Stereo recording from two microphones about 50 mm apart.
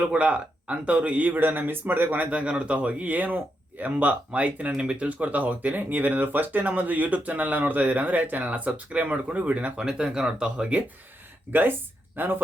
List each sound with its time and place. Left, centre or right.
0.0 s speech: right
1.4 s speech: right
2.3 s speech: right
11.5 s speech: right